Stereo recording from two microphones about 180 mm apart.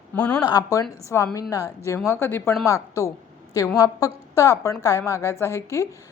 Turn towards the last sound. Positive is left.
turn(degrees=15)  # may be behind; listen again after turning